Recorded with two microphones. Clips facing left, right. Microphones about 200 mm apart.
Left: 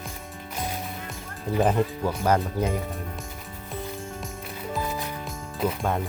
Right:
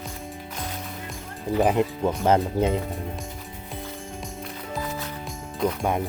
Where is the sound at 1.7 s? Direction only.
20° right (ahead or behind).